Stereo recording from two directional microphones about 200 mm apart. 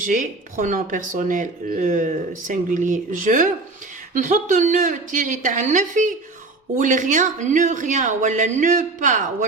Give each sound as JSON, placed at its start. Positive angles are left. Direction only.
{"t": 0.0, "sound": "speech", "side_deg": -40}